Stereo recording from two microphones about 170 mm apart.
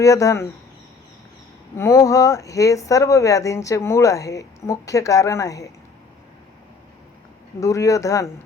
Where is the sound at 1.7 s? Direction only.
15° left (ahead or behind).